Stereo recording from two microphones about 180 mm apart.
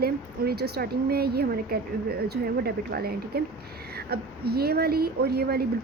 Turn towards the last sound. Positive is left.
turn(degrees=-60)  # may be behind; listen again after turning